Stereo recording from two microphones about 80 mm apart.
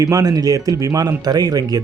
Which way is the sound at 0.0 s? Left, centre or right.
Right.